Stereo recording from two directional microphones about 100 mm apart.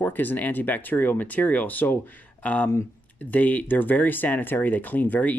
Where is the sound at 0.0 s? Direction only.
20° left (ahead or behind).